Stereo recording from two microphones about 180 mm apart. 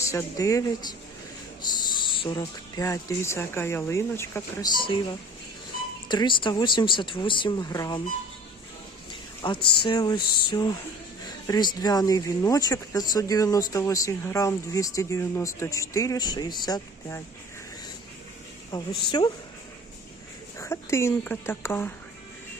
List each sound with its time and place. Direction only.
0.0 s speech: 15° left (ahead or behind)
6.1 s speech: 25° left (ahead or behind)
9.4 s speech: 25° left (ahead or behind)
18.7 s speech: 20° left (ahead or behind)
20.6 s speech: 15° left (ahead or behind)